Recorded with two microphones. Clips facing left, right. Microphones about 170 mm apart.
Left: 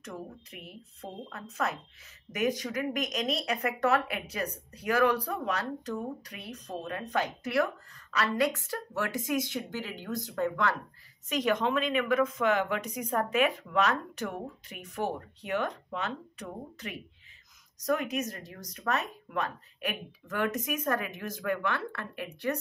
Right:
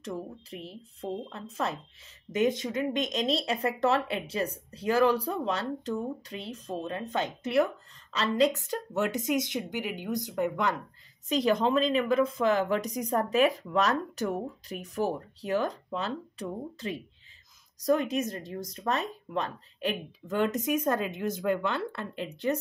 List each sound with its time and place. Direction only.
0.0 s speech: 30° right (ahead or behind)
11.2 s a woman's voice: 35° right (ahead or behind)